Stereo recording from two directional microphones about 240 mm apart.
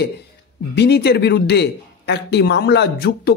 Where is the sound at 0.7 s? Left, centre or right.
Left.